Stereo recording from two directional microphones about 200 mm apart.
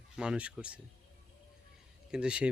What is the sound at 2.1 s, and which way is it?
Speech, 5° right (ahead or behind).